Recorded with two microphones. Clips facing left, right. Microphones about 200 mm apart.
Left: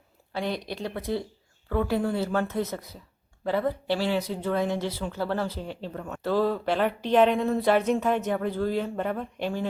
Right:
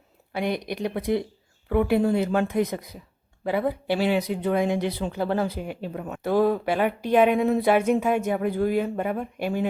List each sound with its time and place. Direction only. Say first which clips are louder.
0.3 s speech: right 3 dB; 15° right (ahead or behind)